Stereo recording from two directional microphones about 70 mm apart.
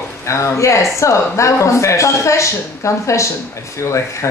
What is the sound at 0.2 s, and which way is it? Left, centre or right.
Speech, left.